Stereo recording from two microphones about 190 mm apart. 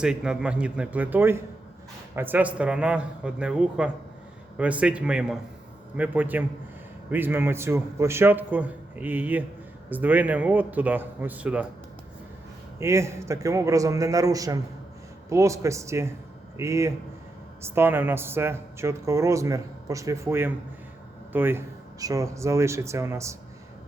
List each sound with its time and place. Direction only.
0.0 s a man's voice: 5° right (ahead or behind)
12.8 s speech: 15° right (ahead or behind)